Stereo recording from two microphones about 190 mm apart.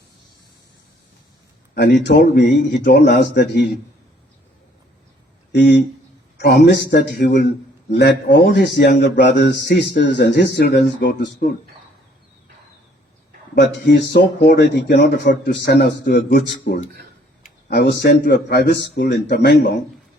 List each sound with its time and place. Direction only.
1.7 s a man's voice: 55° left (ahead or behind)
5.5 s a man's voice: 65° left (ahead or behind)
13.8 s a man's voice: 65° left (ahead or behind)